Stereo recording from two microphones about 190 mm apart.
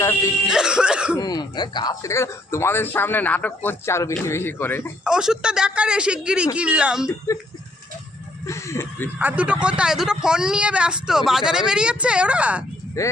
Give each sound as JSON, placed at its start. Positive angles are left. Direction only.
{"t": 0.0, "sound": "speech", "side_deg": 15}
{"t": 0.4, "sound": "cough", "side_deg": -5}
{"t": 1.1, "sound": "speech", "side_deg": 20}
{"t": 5.0, "sound": "speech", "side_deg": -5}
{"t": 8.4, "sound": "speech", "side_deg": 15}
{"t": 9.1, "sound": "speech", "side_deg": -10}
{"t": 13.0, "sound": "speech", "side_deg": 15}